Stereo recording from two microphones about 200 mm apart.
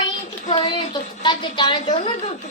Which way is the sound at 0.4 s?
25° left (ahead or behind).